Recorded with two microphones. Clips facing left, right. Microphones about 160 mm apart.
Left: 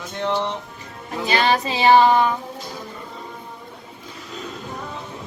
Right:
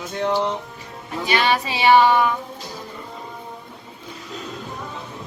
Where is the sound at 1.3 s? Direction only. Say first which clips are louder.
Left 1 dB; 35° left (ahead or behind).